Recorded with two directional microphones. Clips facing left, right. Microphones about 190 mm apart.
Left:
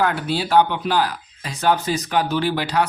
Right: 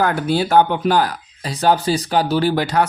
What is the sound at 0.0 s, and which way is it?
Speech, 45° right (ahead or behind).